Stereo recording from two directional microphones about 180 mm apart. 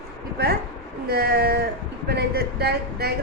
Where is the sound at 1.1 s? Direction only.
60° right (ahead or behind).